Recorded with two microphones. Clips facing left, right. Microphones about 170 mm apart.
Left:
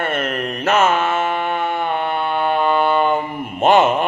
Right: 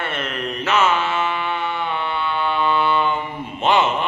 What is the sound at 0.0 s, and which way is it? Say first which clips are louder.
Mantra: left 5 dB; 50° left (ahead or behind).